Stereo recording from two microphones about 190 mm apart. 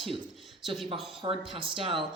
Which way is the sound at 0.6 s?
Centre (ahead or behind).